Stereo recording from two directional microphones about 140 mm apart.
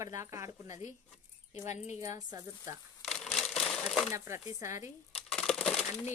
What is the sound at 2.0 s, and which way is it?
Speech, 25° right (ahead or behind).